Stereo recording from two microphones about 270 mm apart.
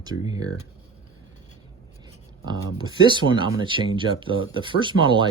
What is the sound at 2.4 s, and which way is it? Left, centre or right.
Speech, centre.